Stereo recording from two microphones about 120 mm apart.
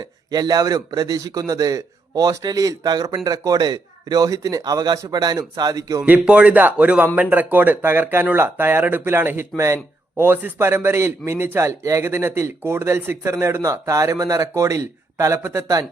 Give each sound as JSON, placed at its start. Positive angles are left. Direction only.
{"t": 0.0, "sound": "a man's voice", "side_deg": -30}
{"t": 6.1, "sound": "a man's voice", "side_deg": -10}